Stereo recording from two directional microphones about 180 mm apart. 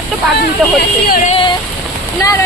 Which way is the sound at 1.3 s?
30° left (ahead or behind).